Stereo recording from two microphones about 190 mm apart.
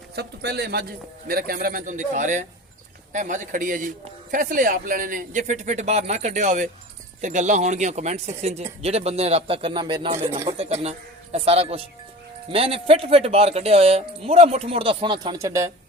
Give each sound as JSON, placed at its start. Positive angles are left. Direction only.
{"t": 0.2, "sound": "a man's voice", "side_deg": -55}